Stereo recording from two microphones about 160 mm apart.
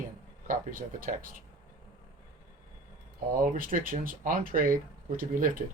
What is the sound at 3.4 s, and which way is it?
Speech, 60° right (ahead or behind).